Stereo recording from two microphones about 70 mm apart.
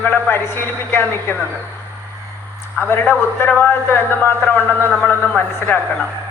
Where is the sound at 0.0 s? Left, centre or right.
Left.